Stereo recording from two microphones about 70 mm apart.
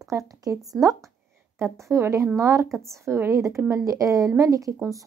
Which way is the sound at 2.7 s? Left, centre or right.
Centre.